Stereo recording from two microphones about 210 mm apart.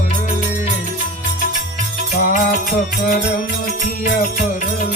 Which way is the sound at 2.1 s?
40° left (ahead or behind).